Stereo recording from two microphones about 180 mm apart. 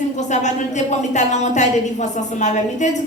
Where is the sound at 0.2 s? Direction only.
40° left (ahead or behind).